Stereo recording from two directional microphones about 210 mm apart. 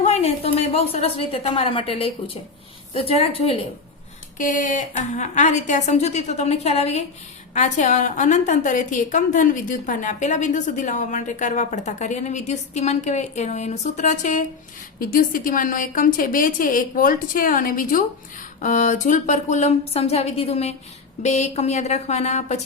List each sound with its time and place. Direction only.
0.0 s a woman's voice: 30° left (ahead or behind)
4.4 s a woman's voice: 40° left (ahead or behind)